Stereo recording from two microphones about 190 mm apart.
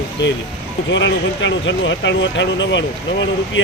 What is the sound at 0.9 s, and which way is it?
Speech, 75° left (ahead or behind).